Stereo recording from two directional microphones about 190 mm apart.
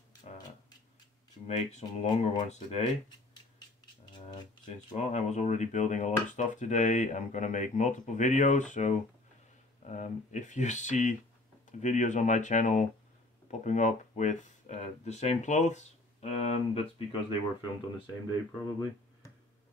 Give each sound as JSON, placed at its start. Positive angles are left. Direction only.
{"t": 1.5, "sound": "speech", "side_deg": 35}
{"t": 4.1, "sound": "a sound", "side_deg": 25}
{"t": 4.9, "sound": "speech", "side_deg": 35}